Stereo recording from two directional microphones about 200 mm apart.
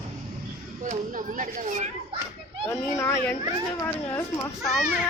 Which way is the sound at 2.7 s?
10° left (ahead or behind).